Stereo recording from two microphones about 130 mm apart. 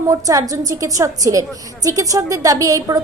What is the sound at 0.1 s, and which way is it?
A woman's voice, 25° right (ahead or behind).